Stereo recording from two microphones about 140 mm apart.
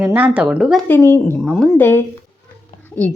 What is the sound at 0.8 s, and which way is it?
A woman's voice, 15° left (ahead or behind).